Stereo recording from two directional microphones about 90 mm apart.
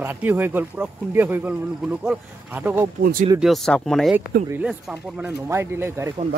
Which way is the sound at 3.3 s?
Centre (ahead or behind).